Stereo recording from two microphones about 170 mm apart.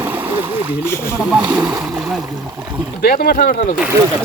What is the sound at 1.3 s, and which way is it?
Speech, 5° right (ahead or behind).